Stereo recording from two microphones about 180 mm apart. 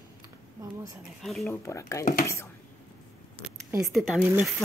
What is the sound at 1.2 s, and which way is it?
Speech, centre (ahead or behind).